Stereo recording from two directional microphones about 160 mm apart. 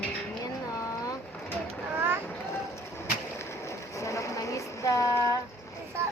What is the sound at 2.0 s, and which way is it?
Boat, 15° right (ahead or behind).